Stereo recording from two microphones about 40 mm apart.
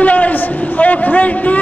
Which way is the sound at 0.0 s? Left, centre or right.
Left.